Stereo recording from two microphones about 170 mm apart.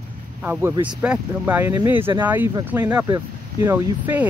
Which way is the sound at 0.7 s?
25° right (ahead or behind).